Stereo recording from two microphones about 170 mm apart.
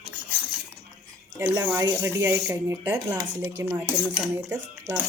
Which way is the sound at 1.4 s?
15° right (ahead or behind).